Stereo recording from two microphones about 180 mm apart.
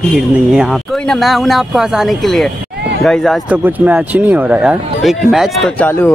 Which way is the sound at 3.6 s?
10° right (ahead or behind).